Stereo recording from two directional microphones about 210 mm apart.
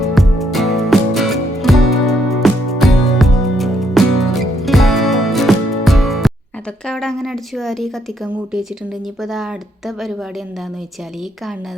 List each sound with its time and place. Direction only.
0.0 s music: centre (ahead or behind)
6.8 s speech: centre (ahead or behind)